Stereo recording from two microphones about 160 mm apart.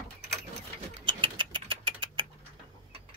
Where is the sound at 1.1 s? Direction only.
30° right (ahead or behind).